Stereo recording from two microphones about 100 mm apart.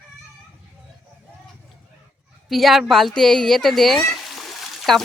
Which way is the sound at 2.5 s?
Centre (ahead or behind).